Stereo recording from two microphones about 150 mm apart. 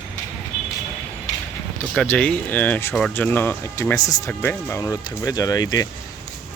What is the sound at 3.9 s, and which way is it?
Speech, 25° left (ahead or behind).